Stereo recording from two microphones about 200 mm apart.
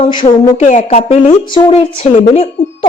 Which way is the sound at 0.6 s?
35° left (ahead or behind).